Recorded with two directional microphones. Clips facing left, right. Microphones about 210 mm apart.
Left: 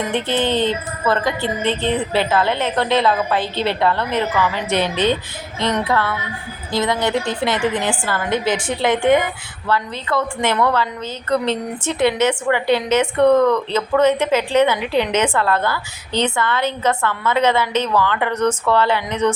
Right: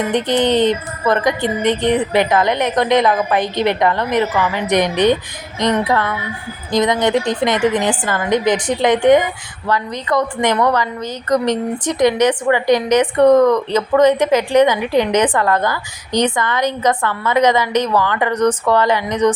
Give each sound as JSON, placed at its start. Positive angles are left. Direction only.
{"t": 0.1, "sound": "a woman's voice", "side_deg": -15}
{"t": 11.9, "sound": "a woman's voice", "side_deg": -15}